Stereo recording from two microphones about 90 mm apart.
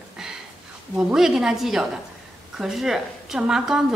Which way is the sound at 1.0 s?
10° right (ahead or behind).